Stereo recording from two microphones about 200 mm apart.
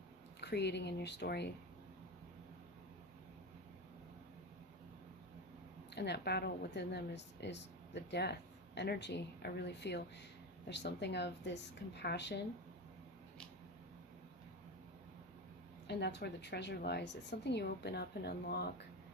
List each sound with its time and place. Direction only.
0.3 s speech: 55° left (ahead or behind)
5.9 s speech: 55° left (ahead or behind)
15.9 s speech: 55° left (ahead or behind)